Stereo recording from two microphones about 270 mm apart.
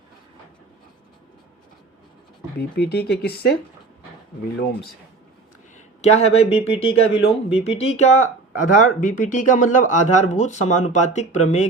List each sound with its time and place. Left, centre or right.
2.6 s speech: left
4.5 s speech: left
5.7 s speech: left